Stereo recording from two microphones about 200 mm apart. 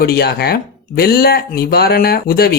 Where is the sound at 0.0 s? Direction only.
50° left (ahead or behind).